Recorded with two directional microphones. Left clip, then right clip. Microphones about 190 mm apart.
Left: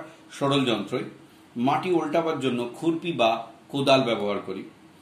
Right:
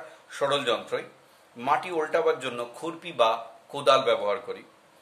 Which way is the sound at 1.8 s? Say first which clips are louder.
Left 1 dB; 20° right (ahead or behind).